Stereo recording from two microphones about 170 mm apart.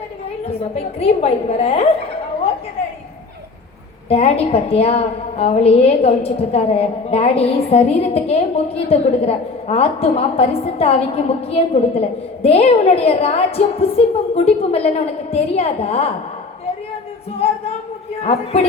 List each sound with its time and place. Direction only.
0.6 s a woman's voice: 35° left (ahead or behind)
4.1 s a woman's voice: 35° left (ahead or behind)
18.2 s a woman's voice: 40° left (ahead or behind)